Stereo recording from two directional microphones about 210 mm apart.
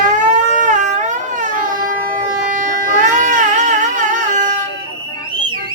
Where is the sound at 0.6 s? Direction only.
35° right (ahead or behind).